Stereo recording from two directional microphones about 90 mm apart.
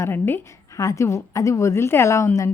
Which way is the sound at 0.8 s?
35° left (ahead or behind).